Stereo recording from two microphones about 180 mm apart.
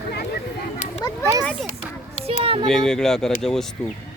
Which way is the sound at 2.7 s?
5° left (ahead or behind).